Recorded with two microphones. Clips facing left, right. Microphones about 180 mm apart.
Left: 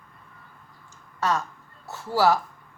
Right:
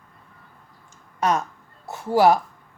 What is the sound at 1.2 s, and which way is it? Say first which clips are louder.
Speech: right 3 dB; 20° right (ahead or behind).